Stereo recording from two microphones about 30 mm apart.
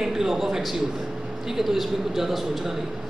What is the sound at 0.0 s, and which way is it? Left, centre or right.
A man's voice, centre.